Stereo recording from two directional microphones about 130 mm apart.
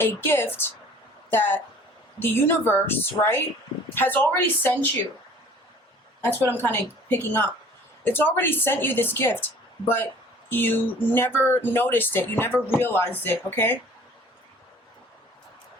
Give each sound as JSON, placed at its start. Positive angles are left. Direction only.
{"t": 0.0, "sound": "speech", "side_deg": 15}
{"t": 6.5, "sound": "speech", "side_deg": 15}